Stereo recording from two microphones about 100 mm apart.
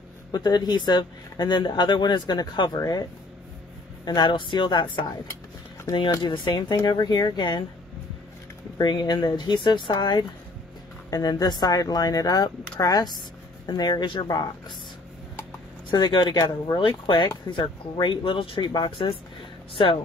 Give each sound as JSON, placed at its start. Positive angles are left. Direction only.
{"t": 0.3, "sound": "speech", "side_deg": 45}
{"t": 6.2, "sound": "speech", "side_deg": 50}
{"t": 8.7, "sound": "speech", "side_deg": 45}
{"t": 11.1, "sound": "speech", "side_deg": 40}
{"t": 15.9, "sound": "speech", "side_deg": 50}
{"t": 19.7, "sound": "speech", "side_deg": 65}